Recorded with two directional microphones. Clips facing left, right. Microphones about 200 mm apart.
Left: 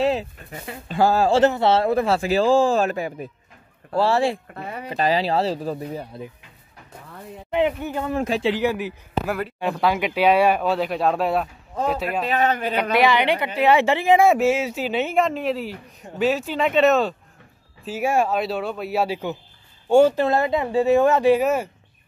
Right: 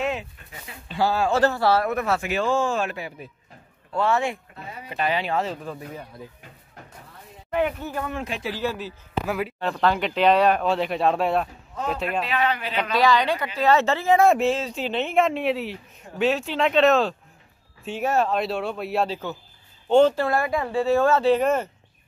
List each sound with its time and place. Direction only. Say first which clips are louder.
0.0 s dog: left 6 dB; 35° left (ahead or behind)
0.5 s speech: left 7 dB; 50° left (ahead or behind)
1.3 s speech: left 3 dB; 20° left (ahead or behind); by 3.3 s 45° left (ahead or behind)
3.9 s speech: left 4 dB; 35° left (ahead or behind)
4.6 s speech: left 6 dB; 60° left (ahead or behind)
4.8 s speech: left 4 dB; 35° left (ahead or behind)
7.5 s speech: left 3 dB; 20° left (ahead or behind)
8.1 s speech: left 8 dB; 35° left (ahead or behind)
8.5 s speech: left 4 dB; 15° left (ahead or behind)
9.2 s speech: left 1 dB; centre (ahead or behind)
9.6 s speech: left 2 dB; 10° left (ahead or behind)
12.1 s speech: left 1 dB; 45° left (ahead or behind)
12.9 s speech: left 1 dB; 20° left (ahead or behind)
20.2 s speech: left 3 dB; 20° left (ahead or behind)